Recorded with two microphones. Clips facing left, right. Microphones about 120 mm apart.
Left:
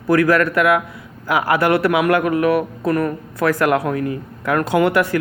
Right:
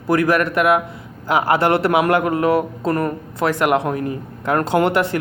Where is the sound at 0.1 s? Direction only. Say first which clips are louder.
Left 2 dB; 20° right (ahead or behind).